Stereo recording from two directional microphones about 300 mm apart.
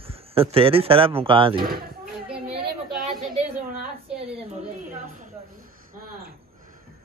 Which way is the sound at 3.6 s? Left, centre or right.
Right.